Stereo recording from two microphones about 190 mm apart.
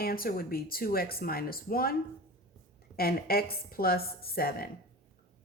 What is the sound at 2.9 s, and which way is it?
Speech, 50° left (ahead or behind).